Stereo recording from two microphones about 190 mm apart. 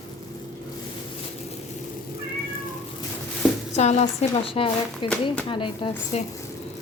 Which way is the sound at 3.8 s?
35° left (ahead or behind).